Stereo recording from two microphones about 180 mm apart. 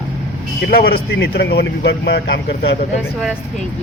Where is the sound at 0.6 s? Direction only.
60° left (ahead or behind); by 2.7 s 75° left (ahead or behind).